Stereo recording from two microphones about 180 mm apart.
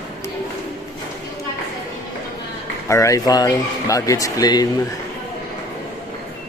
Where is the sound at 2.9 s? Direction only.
15° left (ahead or behind).